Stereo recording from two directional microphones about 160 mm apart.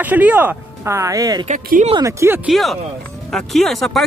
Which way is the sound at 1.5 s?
50° right (ahead or behind).